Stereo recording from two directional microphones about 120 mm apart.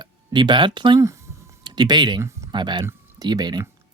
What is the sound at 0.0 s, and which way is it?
Speech, 40° right (ahead or behind).